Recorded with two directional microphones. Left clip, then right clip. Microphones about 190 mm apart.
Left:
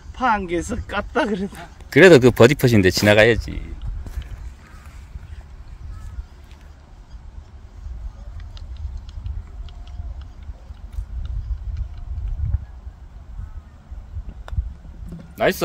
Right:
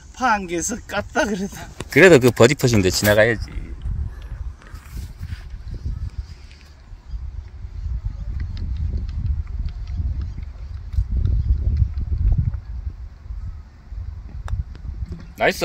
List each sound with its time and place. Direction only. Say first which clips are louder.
0.1 s speech: even; 35° right (ahead or behind)
1.9 s speech: left 1 dB; 10° left (ahead or behind)
3.2 s speech: left 2 dB; 45° left (ahead or behind)
15.3 s a sound: even; 55° left (ahead or behind)